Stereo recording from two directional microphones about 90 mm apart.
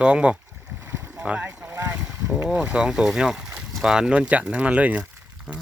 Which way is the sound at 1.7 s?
40° right (ahead or behind).